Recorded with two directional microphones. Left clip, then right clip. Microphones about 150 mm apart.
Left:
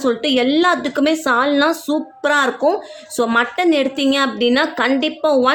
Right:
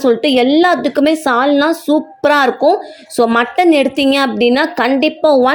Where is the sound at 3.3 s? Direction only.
30° right (ahead or behind).